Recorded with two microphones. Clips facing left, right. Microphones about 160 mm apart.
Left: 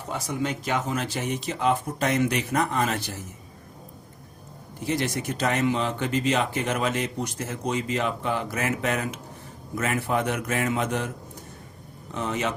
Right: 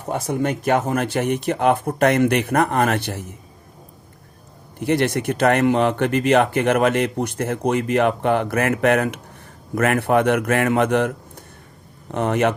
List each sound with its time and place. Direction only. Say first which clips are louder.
0.0 s speech: right 7 dB; 55° right (ahead or behind)
4.8 s speech: right 8 dB; 60° right (ahead or behind)
12.1 s speech: right 9 dB; 60° right (ahead or behind)